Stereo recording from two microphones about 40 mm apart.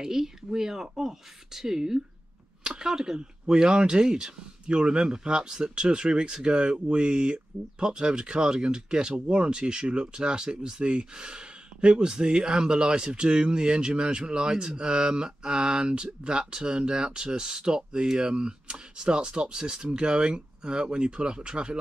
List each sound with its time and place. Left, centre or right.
0.0 s speech: centre